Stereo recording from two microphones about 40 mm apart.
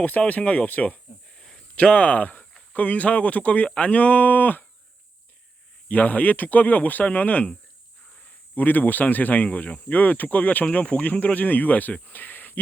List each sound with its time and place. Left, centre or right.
0.3 s speech: left
1.4 s a sound: centre
1.7 s speech: left
5.9 s speech: left
8.5 s speech: left